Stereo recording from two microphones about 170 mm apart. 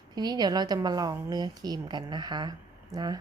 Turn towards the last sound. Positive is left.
turn(degrees=-25)  # may be behind; listen again after turning